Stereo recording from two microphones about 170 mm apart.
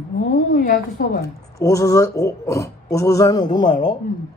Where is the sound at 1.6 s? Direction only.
20° left (ahead or behind).